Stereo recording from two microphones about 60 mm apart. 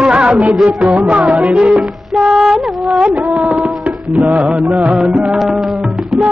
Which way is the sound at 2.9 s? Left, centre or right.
Centre.